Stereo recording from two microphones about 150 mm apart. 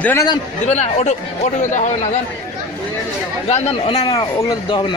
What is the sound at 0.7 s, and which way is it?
Speech, 50° left (ahead or behind).